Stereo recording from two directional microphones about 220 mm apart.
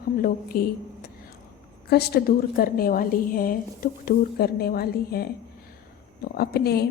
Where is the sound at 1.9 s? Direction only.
45° left (ahead or behind).